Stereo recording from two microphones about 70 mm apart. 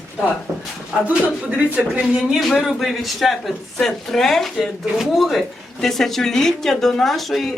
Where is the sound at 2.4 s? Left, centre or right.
Centre.